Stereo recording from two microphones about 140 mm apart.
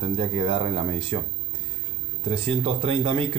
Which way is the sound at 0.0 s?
40° right (ahead or behind).